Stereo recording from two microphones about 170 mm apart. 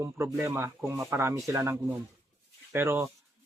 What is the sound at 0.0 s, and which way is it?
Speech, 20° right (ahead or behind).